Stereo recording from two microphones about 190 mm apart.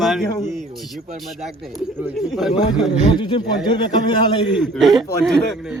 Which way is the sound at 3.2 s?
25° left (ahead or behind).